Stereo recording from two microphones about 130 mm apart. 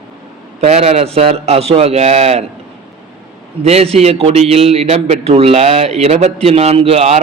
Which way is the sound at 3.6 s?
55° right (ahead or behind).